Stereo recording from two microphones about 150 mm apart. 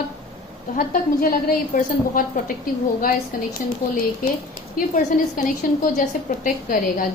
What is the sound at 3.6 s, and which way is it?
Speech, 70° left (ahead or behind).